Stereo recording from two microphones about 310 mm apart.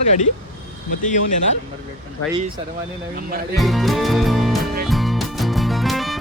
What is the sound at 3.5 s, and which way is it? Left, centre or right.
Speech, centre.